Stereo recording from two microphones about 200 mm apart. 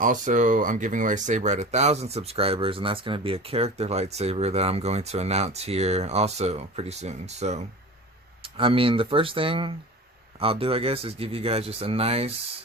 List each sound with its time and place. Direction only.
0.0 s speech: 40° right (ahead or behind)